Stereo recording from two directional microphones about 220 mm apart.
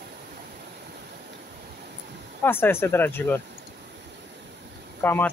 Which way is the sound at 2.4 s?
10° left (ahead or behind).